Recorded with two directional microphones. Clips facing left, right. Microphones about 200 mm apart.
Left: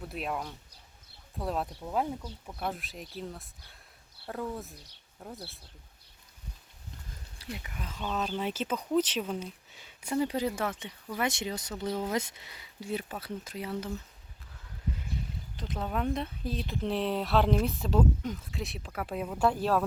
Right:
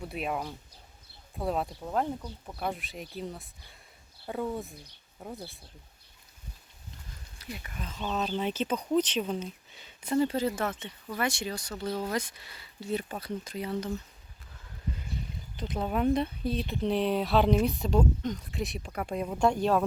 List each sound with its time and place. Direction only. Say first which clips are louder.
0.0 s speech: right 2 dB; centre (ahead or behind)
7.5 s speech: even; 10° left (ahead or behind)
15.5 s speech: right 3 dB; centre (ahead or behind)